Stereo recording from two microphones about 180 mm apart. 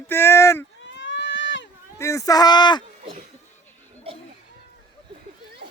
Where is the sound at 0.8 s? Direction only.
90° left.